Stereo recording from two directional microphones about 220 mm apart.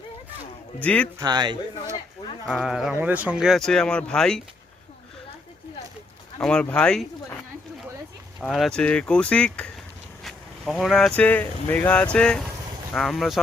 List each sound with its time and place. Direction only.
0.8 s a man's voice: 5° left (ahead or behind)
1.2 s a man's voice: 20° right (ahead or behind)
2.5 s speech: centre (ahead or behind)
6.4 s speech: 5° left (ahead or behind)
8.4 s speech: centre (ahead or behind)